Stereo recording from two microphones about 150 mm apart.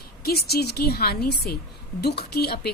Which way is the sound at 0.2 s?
90° left.